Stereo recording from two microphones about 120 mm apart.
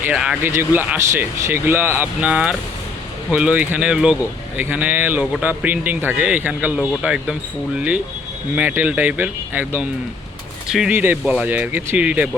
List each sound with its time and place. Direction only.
0.0 s speech: 5° right (ahead or behind)
0.4 s speech: 20° right (ahead or behind)
8.5 s speech: 15° right (ahead or behind)
10.7 s speech: 5° right (ahead or behind)
10.9 s speech: 15° right (ahead or behind)